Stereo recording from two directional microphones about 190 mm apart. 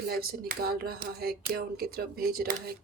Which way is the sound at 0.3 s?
55° right (ahead or behind).